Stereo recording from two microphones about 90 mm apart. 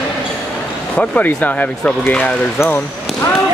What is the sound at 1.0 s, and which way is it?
Speech, 15° left (ahead or behind).